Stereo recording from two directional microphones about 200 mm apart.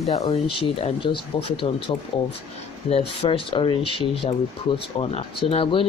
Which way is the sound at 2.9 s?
30° left (ahead or behind).